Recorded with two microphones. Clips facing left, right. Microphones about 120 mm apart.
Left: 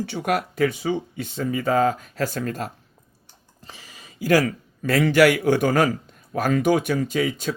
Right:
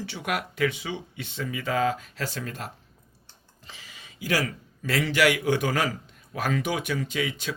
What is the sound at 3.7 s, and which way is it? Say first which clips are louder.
Speech: left 3 dB; 40° left (ahead or behind).